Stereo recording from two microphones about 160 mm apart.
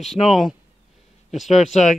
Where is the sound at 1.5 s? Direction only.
45° left (ahead or behind).